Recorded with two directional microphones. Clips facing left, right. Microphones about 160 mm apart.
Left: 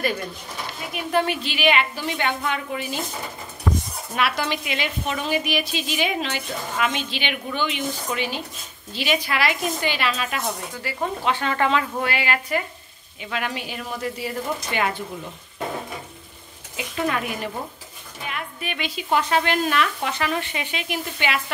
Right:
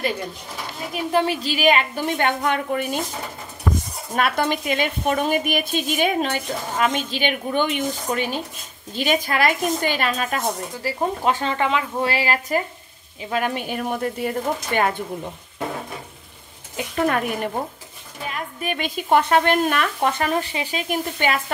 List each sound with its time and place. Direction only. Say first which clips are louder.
0.9 s a woman's voice: right 2 dB; 30° right (ahead or behind); by 3.0 s 55° right (ahead or behind)
4.1 s a woman's voice: right 3 dB; 50° right (ahead or behind)
11.5 s speech: left 1 dB; 15° right (ahead or behind)
12.0 s a woman's voice: right 3 dB; 35° right (ahead or behind); by 14.9 s 50° right (ahead or behind)
16.7 s a woman's voice: right 4 dB; 50° right (ahead or behind)